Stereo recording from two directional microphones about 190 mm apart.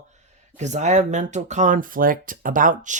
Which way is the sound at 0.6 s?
40° right (ahead or behind).